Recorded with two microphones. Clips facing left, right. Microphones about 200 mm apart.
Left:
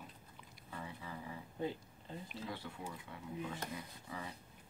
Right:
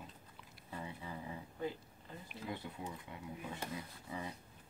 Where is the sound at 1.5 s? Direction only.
25° left (ahead or behind).